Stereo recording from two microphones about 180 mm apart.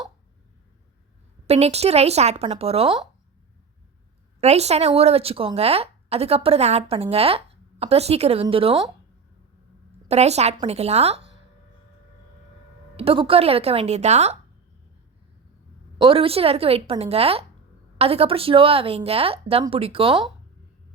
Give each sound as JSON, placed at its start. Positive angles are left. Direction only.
{"t": 1.5, "sound": "a woman's voice", "side_deg": -35}
{"t": 4.4, "sound": "a woman's voice", "side_deg": -35}
{"t": 10.1, "sound": "a woman's voice", "side_deg": -35}
{"t": 13.0, "sound": "a woman's voice", "side_deg": -30}
{"t": 16.0, "sound": "a woman's voice", "side_deg": -30}